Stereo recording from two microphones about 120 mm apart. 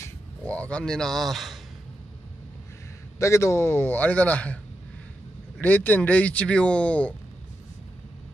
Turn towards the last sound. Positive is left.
turn(degrees=10)  # may be behind; listen again after turning